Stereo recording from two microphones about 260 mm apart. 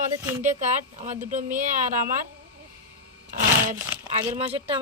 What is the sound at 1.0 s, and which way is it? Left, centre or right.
Speech, right.